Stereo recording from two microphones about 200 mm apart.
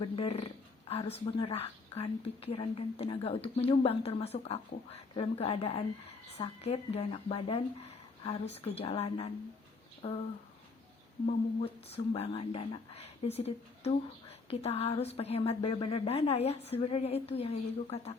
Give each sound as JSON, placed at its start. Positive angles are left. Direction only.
{"t": 0.0, "sound": "speech", "side_deg": 30}
{"t": 11.3, "sound": "speech", "side_deg": 30}